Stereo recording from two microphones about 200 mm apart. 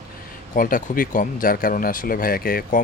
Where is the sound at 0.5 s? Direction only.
45° left (ahead or behind).